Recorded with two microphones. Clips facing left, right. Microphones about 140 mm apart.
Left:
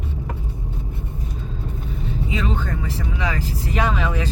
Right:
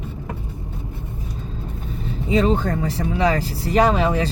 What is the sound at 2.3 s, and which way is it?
Speech, 35° right (ahead or behind).